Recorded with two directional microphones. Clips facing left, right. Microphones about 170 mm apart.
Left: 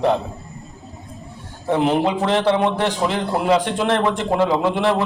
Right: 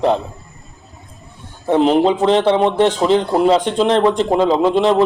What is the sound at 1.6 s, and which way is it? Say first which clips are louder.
A man's voice: right 5 dB; 20° right (ahead or behind).